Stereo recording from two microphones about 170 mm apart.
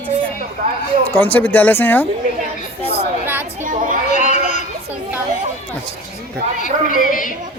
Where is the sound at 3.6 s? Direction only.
50° right (ahead or behind).